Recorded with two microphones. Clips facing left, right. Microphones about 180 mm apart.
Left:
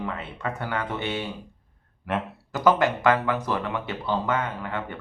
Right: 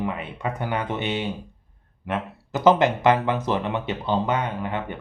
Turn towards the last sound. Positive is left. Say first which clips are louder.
# right 3 dB
turn(degrees=-20)  # may be behind; listen again after turning